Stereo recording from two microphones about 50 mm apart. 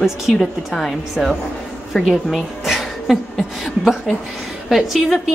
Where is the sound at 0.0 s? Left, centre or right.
Centre.